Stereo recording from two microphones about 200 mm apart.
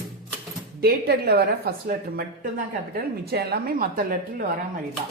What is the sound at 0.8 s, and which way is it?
A woman's voice, 50° right (ahead or behind).